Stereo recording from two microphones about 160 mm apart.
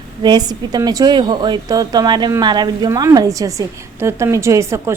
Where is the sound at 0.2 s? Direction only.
25° right (ahead or behind).